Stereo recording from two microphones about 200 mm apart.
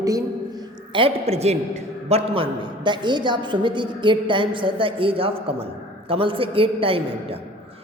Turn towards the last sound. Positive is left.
turn(degrees=-25)  # may be behind; listen again after turning